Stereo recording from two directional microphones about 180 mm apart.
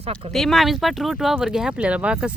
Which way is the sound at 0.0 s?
35° right (ahead or behind).